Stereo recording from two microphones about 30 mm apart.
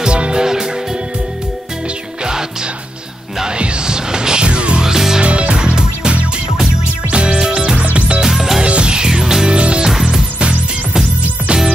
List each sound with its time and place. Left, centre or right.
0.1 s music: right
0.4 s music: centre
3.4 s music: right
4.5 s music: right
4.8 s music: centre
5.2 s music: right
5.6 s music: right
7.1 s music: right
7.3 s music: right
7.8 s music: right
8.2 s music: centre
8.6 s music: right; by 9.5 s centre
9.5 s music: right